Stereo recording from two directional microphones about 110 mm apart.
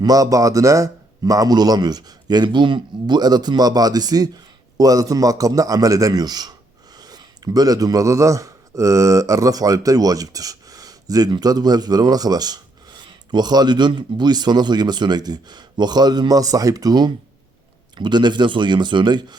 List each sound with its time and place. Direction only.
0.0 s a man's voice: 35° right (ahead or behind)